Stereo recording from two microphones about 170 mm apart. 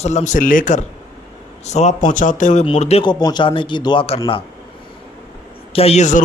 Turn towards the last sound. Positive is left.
turn(degrees=45)  # may be behind; listen again after turning